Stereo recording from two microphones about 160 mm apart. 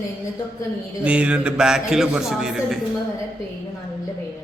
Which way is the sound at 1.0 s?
5° right (ahead or behind).